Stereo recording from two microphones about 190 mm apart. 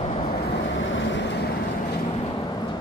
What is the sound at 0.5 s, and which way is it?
Vehicle, 70° left (ahead or behind).